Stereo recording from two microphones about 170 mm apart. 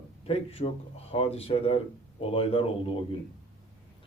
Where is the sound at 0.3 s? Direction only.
40° left (ahead or behind).